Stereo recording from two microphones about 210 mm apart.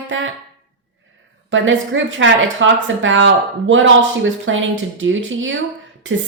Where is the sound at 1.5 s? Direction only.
65° right (ahead or behind).